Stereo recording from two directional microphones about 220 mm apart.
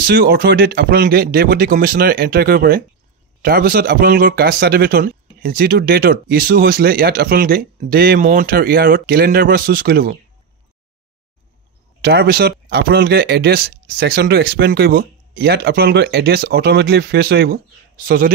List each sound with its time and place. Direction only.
0.0 s speech: 45° right (ahead or behind)
12.0 s speech: 45° right (ahead or behind)